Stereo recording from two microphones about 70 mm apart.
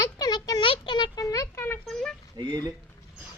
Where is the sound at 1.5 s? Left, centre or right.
Left.